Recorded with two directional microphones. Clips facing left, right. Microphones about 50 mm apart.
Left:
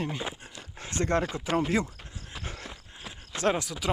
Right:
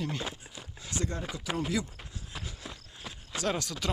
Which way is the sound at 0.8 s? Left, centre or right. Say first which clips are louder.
Left 4 dB; left.